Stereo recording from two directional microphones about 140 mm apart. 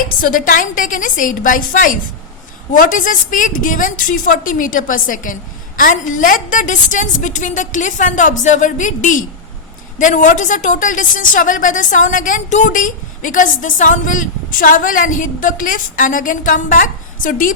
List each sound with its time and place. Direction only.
0.2 s a woman's voice: 75° left (ahead or behind)